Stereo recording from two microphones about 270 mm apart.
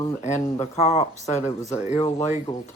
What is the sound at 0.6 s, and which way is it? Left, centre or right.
Speech, left.